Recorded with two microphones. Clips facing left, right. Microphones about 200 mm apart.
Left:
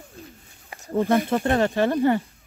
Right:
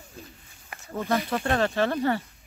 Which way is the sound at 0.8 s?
35° left (ahead or behind).